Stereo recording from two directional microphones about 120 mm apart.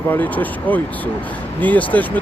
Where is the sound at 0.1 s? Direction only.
15° left (ahead or behind).